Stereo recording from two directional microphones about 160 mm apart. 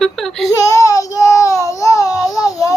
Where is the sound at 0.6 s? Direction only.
20° left (ahead or behind).